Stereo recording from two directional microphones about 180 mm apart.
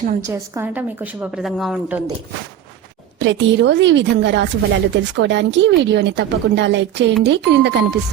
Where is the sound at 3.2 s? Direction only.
85° right.